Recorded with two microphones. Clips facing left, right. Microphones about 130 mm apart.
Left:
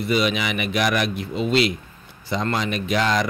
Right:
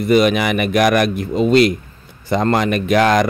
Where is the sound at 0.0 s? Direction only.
50° right (ahead or behind).